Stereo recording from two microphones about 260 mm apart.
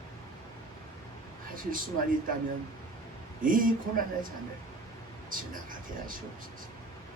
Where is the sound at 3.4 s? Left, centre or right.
Right.